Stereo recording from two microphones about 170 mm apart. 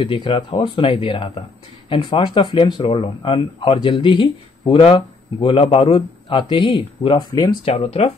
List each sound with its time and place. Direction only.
0.0 s speech: 30° left (ahead or behind)
7.7 s speech: 35° left (ahead or behind)